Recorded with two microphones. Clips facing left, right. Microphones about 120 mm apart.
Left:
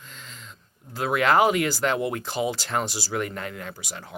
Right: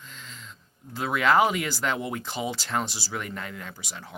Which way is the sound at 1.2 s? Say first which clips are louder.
Left 2 dB; centre (ahead or behind).